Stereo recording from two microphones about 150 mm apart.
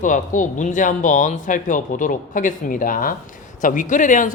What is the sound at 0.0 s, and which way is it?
A man's voice, 60° left (ahead or behind).